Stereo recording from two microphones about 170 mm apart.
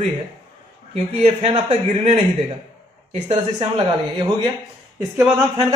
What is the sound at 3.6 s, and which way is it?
Speech, 30° right (ahead or behind).